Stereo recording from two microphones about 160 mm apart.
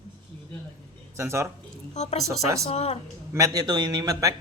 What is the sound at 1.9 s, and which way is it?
A woman's voice, 45° left (ahead or behind).